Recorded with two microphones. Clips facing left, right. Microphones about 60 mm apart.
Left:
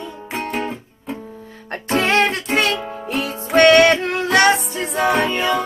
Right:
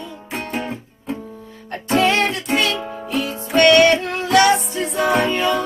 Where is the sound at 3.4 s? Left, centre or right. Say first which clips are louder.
Left 1 dB; left.